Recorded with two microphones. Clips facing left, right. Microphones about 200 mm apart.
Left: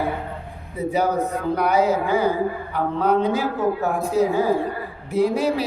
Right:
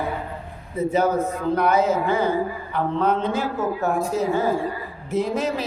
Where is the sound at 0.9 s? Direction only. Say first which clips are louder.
Even; 15° left (ahead or behind).